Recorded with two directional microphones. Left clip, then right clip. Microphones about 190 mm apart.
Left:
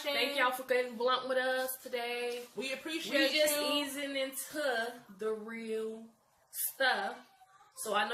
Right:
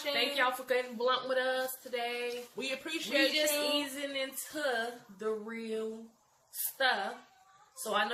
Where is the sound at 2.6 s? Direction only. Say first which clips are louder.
Right 3 dB; 20° right (ahead or behind).